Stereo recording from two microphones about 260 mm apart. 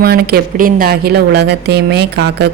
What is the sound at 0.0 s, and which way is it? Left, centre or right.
Speech, right.